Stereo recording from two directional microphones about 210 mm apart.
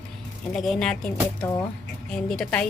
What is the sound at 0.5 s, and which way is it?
Speech, centre (ahead or behind).